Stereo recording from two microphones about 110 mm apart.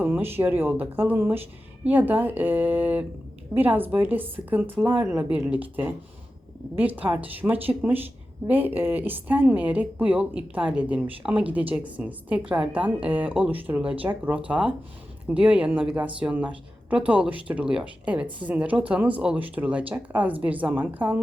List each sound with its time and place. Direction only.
0.0 s a woman's voice: 20° right (ahead or behind)